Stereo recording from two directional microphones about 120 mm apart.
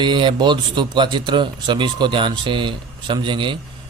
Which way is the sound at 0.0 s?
40° right (ahead or behind).